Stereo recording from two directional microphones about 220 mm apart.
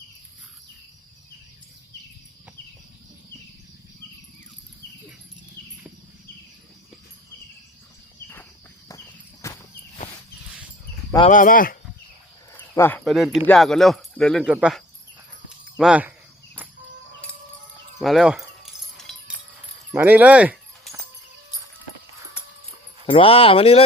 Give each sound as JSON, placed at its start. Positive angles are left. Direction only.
{"t": 8.9, "sound": "walk", "side_deg": 15}
{"t": 11.3, "sound": "speech", "side_deg": 35}
{"t": 12.5, "sound": "speech", "side_deg": 10}
{"t": 15.8, "sound": "speech", "side_deg": -5}
{"t": 18.0, "sound": "keys jangling", "side_deg": 0}
{"t": 19.9, "sound": "a sound", "side_deg": -10}
{"t": 23.0, "sound": "speech", "side_deg": 25}